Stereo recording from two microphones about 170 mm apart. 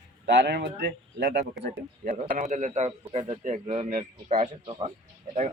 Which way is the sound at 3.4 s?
45° right (ahead or behind).